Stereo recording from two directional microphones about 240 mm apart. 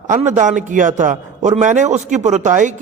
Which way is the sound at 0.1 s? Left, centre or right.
Right.